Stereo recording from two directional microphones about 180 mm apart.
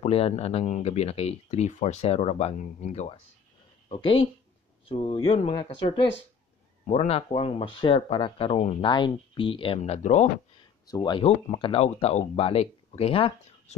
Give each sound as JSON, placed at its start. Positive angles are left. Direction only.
{"t": 0.0, "sound": "speech", "side_deg": 35}
{"t": 10.9, "sound": "speech", "side_deg": 25}